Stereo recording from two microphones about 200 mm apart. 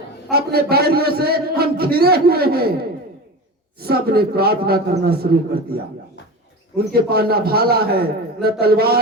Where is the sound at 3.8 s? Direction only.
50° right (ahead or behind).